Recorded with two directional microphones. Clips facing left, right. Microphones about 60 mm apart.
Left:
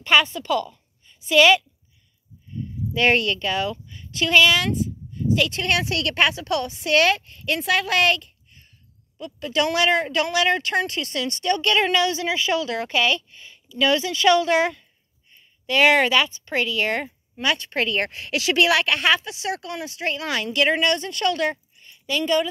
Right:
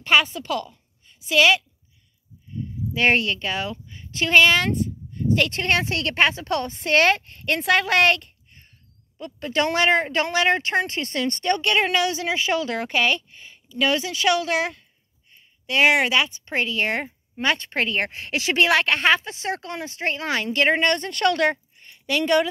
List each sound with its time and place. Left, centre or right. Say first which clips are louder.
0.0 s a woman's voice: left 1 dB; right
2.9 s speech: left 1 dB; right
11.6 s speech: left 2 dB; right
15.3 s a sound: left 1 dB; centre
16.3 s a woman's voice: left 1 dB; right